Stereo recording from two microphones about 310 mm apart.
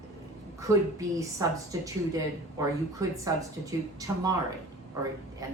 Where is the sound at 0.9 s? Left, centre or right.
Centre.